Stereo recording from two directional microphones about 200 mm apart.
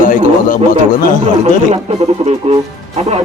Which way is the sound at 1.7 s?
30° right (ahead or behind).